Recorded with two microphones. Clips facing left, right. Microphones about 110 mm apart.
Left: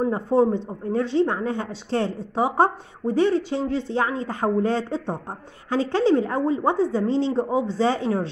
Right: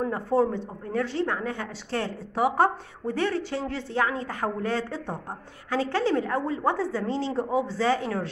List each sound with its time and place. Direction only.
0.0 s a woman's voice: 20° left (ahead or behind)